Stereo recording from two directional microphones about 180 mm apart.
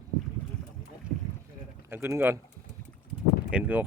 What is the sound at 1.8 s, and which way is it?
Speech, 10° right (ahead or behind).